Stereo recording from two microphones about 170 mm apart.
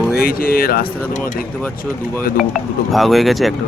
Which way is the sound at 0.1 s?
60° left (ahead or behind).